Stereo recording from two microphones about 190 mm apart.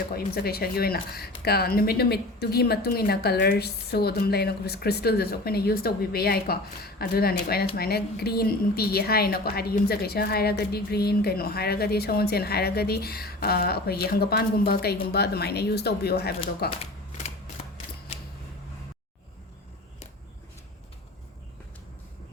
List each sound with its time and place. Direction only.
0.1 s a woman's voice: 55° left (ahead or behind)